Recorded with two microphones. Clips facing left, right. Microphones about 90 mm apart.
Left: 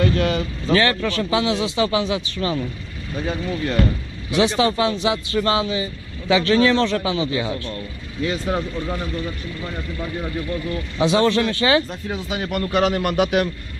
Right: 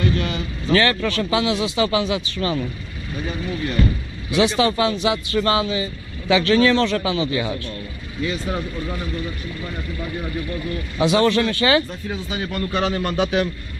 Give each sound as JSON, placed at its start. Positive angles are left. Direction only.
{"t": 0.0, "sound": "vehicle", "side_deg": 90}
{"t": 0.7, "sound": "speech", "side_deg": 15}
{"t": 3.3, "sound": "speech", "side_deg": 90}
{"t": 4.3, "sound": "speech", "side_deg": 25}
{"t": 8.2, "sound": "speech", "side_deg": 55}
{"t": 8.5, "sound": "speech", "side_deg": 35}
{"t": 11.1, "sound": "speech", "side_deg": 20}
{"t": 12.3, "sound": "a man's voice", "side_deg": 70}